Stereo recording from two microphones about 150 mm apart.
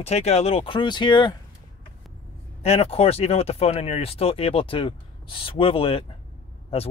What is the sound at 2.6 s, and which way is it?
Speech, 40° left (ahead or behind).